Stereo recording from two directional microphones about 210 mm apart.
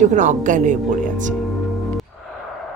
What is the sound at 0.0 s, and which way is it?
Speech, 35° right (ahead or behind).